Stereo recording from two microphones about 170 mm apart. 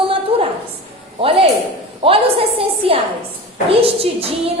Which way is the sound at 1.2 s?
30° right (ahead or behind).